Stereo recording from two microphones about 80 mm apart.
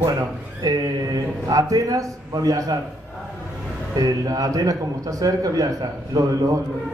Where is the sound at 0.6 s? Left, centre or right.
Right.